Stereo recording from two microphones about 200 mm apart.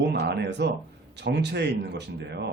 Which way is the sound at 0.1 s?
55° right (ahead or behind).